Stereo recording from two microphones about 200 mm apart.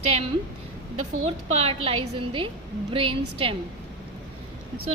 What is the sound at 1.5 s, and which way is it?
A woman's voice, 30° right (ahead or behind).